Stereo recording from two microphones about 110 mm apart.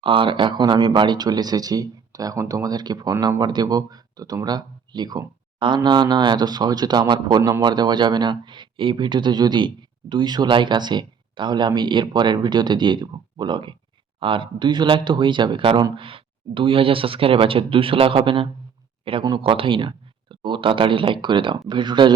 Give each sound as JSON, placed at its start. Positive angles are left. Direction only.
{"t": 0.0, "sound": "speech", "side_deg": -50}